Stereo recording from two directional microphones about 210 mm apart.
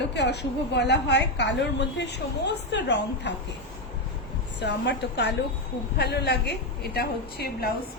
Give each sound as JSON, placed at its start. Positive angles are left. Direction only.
{"t": 0.1, "sound": "a woman's voice", "side_deg": 55}
{"t": 4.6, "sound": "a woman's voice", "side_deg": 55}